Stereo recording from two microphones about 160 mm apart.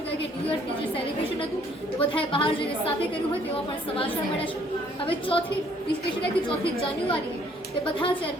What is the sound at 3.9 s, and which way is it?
Speech, 35° left (ahead or behind).